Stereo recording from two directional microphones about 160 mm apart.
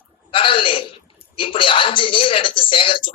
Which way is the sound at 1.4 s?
30° left (ahead or behind).